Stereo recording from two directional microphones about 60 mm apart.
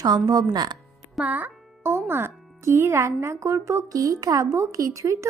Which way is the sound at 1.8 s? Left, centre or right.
Right.